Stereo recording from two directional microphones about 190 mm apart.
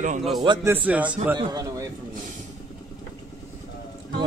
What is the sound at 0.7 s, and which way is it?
Speech, 10° right (ahead or behind).